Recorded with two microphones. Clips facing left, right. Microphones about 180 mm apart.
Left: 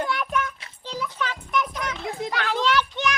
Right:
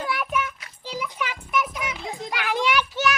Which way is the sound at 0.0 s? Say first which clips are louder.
Left 1 dB; 5° right (ahead or behind).